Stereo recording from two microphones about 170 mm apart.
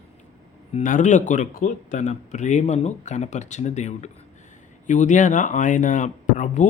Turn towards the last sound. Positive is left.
turn(degrees=45)  # may be behind; listen again after turning